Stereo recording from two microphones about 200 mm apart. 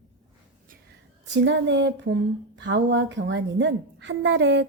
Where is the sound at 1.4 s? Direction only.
65° right (ahead or behind).